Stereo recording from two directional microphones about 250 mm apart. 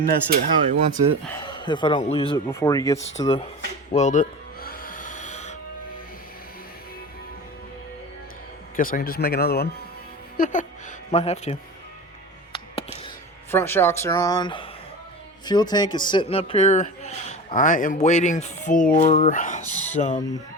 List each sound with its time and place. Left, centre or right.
0.0 s speech: right
1.3 s speech: centre
3.2 s speech: left
3.9 s music: left
8.7 s speech: left
12.5 s music: left
13.5 s speech: centre; by 20.2 s left